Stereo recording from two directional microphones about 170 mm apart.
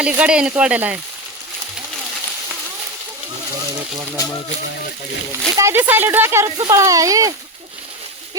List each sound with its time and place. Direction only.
0.0 s speech: 5° right (ahead or behind)
5.5 s speech: 15° right (ahead or behind)